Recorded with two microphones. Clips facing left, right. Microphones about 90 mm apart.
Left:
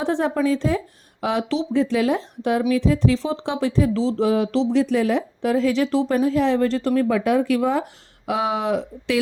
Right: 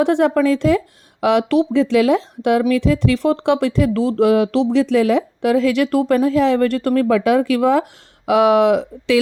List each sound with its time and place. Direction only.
0.0 s speech: 75° right (ahead or behind); by 9.1 s 90° right